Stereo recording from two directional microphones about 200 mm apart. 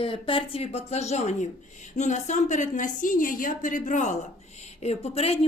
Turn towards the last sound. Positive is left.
turn(degrees=30)  # may be behind; listen again after turning